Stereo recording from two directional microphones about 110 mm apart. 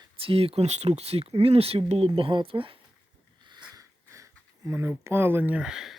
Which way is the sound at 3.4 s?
45° right (ahead or behind).